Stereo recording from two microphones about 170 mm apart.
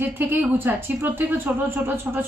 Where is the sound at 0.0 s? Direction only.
10° right (ahead or behind).